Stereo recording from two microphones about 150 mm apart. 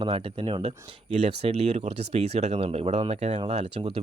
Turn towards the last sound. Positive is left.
turn(degrees=-40)  # may be behind; listen again after turning